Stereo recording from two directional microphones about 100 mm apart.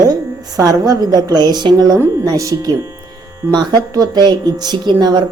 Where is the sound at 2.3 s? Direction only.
35° right (ahead or behind).